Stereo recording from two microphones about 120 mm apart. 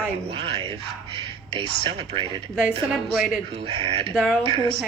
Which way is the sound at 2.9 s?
5° right (ahead or behind).